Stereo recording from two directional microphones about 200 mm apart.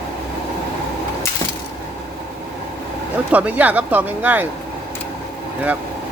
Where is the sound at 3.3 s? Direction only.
10° right (ahead or behind).